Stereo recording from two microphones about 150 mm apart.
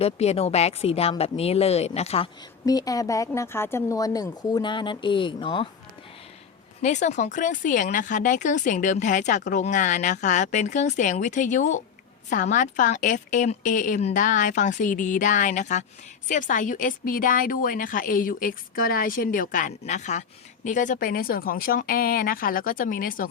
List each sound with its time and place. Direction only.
0.0 s a woman's voice: 45° left (ahead or behind)
2.6 s speech: 25° left (ahead or behind)
6.8 s a woman's voice: 55° left (ahead or behind); by 23.3 s 70° left (ahead or behind)